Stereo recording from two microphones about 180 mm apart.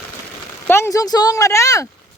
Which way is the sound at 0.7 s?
15° left (ahead or behind).